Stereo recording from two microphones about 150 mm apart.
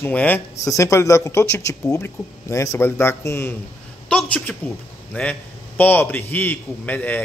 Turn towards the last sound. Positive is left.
turn(degrees=10)  # may be behind; listen again after turning